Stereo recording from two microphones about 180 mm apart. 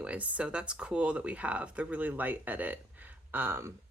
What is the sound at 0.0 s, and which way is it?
Speech, 5° right (ahead or behind).